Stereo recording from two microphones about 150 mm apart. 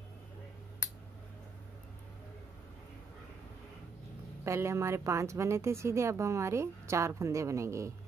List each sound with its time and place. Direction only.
4.5 s a woman's voice: 20° right (ahead or behind)